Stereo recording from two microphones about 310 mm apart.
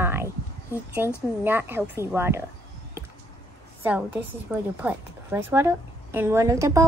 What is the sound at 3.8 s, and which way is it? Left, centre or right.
A woman's voice, centre.